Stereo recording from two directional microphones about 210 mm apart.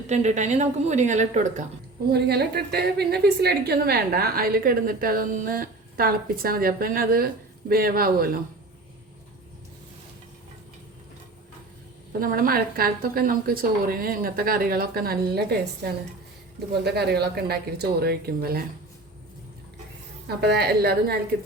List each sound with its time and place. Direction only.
0.1 s a woman's voice: 35° right (ahead or behind)
2.0 s a woman's voice: 50° right (ahead or behind)
12.2 s a woman's voice: 45° right (ahead or behind)
20.2 s a woman's voice: 50° right (ahead or behind)